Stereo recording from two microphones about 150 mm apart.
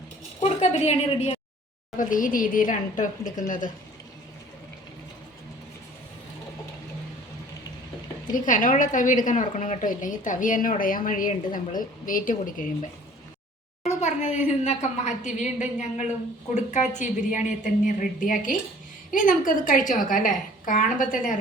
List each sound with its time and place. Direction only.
0.4 s a sound: 50° left (ahead or behind)
0.9 s a woman's voice: 45° left (ahead or behind)
2.0 s a woman's voice: 60° left (ahead or behind)
8.3 s a woman's voice: 60° left (ahead or behind)
13.8 s a woman's voice: 50° left (ahead or behind)